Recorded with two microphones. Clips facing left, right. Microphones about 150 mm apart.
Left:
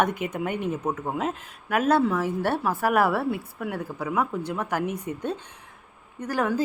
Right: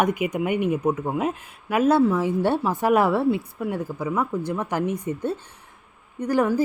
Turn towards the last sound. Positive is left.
turn(degrees=-15)  # may be behind; listen again after turning